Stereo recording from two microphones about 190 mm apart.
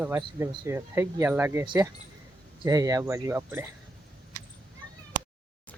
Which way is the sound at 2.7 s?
20° right (ahead or behind).